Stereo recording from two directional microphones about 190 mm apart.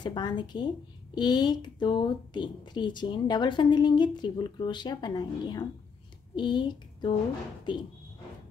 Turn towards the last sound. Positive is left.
turn(degrees=25)  # may be behind; listen again after turning